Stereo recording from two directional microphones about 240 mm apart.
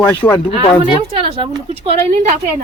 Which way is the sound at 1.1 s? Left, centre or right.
Right.